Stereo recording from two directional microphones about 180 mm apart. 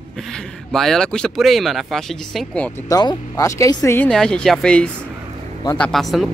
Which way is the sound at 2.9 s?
20° left (ahead or behind).